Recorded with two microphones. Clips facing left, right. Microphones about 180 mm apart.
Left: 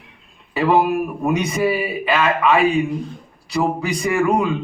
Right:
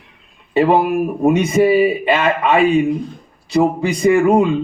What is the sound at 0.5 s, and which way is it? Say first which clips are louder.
A man's voice: right 3 dB; 25° right (ahead or behind).